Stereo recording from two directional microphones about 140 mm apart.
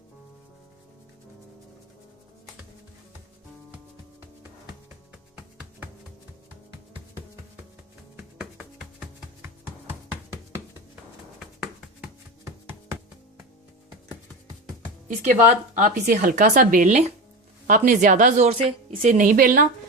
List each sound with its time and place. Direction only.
8.1 s music: 5° right (ahead or behind)
11.6 s music: 5° right (ahead or behind)
12.5 s music: 20° right (ahead or behind)
15.0 s a woman's voice: 65° right (ahead or behind)